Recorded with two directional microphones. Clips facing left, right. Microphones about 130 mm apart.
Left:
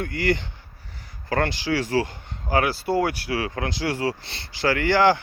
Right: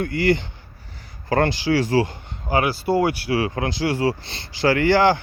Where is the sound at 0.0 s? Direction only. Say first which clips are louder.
Right 4 dB; 30° right (ahead or behind).